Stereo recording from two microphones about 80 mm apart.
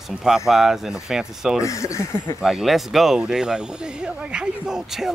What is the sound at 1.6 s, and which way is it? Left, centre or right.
Speech, left.